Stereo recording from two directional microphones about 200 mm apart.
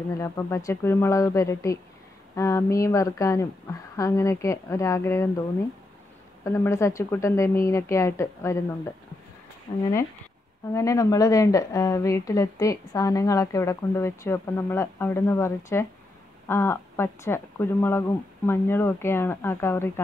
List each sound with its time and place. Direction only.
0.2 s a woman's voice: 15° left (ahead or behind)
6.4 s a woman's voice: 15° left (ahead or behind)
9.7 s a woman's voice: 25° left (ahead or behind)